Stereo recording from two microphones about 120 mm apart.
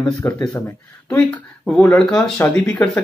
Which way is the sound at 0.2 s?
25° left (ahead or behind).